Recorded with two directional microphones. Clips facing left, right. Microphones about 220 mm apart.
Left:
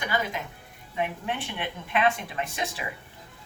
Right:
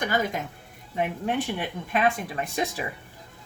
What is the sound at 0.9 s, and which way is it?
Speech, 40° right (ahead or behind).